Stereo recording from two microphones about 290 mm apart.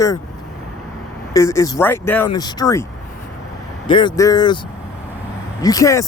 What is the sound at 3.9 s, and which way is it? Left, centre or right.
Speech, centre.